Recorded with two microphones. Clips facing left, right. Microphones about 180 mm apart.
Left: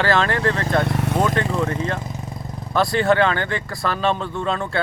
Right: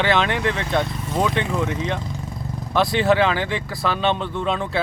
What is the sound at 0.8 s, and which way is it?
Vehicle, 70° left (ahead or behind).